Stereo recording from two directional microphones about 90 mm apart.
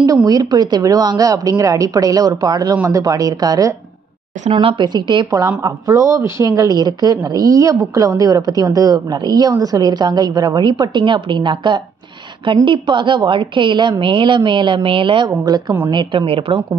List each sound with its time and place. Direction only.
0.0 s a woman's voice: 45° right (ahead or behind)
4.5 s a woman's voice: 80° right; by 5.2 s 55° right (ahead or behind)
5.6 s a woman's voice: 40° right (ahead or behind); by 15.2 s 75° right (ahead or behind)
15.2 s speech: 45° right (ahead or behind)
15.9 s a woman's voice: 60° right (ahead or behind); by 16.6 s 80° right